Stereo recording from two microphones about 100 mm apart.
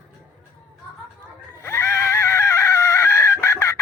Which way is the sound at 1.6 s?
25° left (ahead or behind).